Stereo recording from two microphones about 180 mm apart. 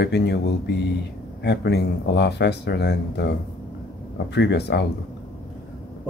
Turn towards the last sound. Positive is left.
turn(degrees=70)  # may be behind; listen again after turning